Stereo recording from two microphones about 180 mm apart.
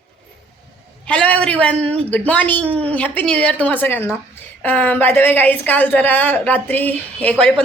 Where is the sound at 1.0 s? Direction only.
5° left (ahead or behind).